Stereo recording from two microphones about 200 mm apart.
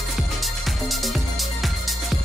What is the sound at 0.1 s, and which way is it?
Music, centre (ahead or behind).